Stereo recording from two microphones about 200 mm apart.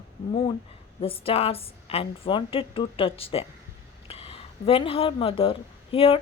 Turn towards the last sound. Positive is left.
turn(degrees=30)  # may be behind; listen again after turning